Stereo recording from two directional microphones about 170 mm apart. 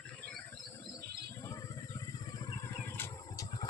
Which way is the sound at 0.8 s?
20° left (ahead or behind).